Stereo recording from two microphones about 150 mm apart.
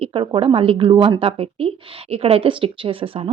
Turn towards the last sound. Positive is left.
turn(degrees=-40)  # may be behind; listen again after turning